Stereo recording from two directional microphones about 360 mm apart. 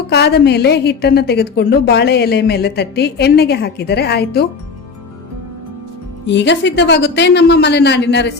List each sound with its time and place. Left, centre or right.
0.1 s a woman's voice: left
6.2 s a woman's voice: left